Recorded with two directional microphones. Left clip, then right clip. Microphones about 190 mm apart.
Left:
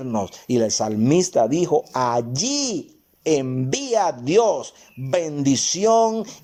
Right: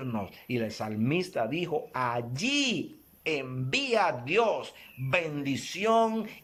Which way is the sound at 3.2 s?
35° left (ahead or behind).